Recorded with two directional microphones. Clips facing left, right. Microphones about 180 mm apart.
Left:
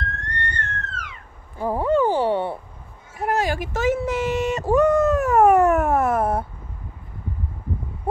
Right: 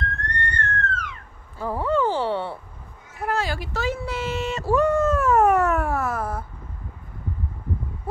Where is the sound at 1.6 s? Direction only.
15° left (ahead or behind).